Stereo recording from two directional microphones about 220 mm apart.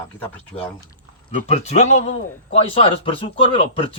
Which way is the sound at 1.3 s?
30° left (ahead or behind).